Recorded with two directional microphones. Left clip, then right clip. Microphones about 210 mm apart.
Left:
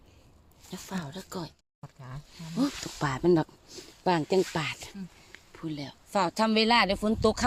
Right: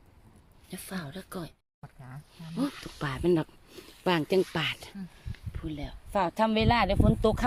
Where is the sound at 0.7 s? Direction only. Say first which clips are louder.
Left 1 dB; centre (ahead or behind).